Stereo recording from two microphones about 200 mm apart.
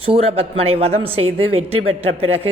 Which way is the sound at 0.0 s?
30° right (ahead or behind).